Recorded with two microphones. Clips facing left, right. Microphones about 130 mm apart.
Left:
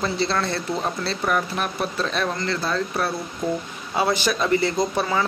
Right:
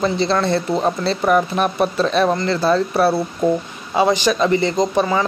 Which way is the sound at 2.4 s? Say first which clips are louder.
Right 8 dB; 25° right (ahead or behind).